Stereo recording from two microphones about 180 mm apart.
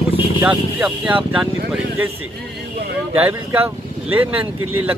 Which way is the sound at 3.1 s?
10° right (ahead or behind).